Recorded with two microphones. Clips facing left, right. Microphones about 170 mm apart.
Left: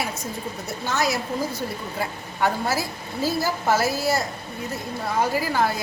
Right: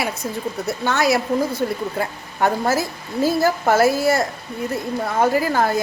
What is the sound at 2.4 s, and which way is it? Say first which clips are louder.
A woman's voice: right 5 dB; 45° right (ahead or behind).